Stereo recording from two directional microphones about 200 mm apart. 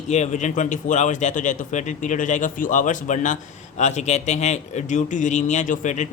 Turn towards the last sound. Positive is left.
turn(degrees=40)  # may be behind; listen again after turning